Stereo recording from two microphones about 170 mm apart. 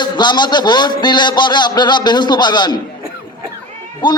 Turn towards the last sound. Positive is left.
turn(degrees=25)  # may be behind; listen again after turning